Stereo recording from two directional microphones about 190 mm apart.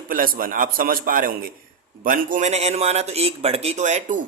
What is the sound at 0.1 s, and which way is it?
A man's voice, 50° right (ahead or behind).